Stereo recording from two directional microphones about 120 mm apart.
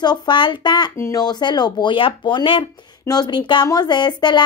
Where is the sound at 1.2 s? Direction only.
35° left (ahead or behind).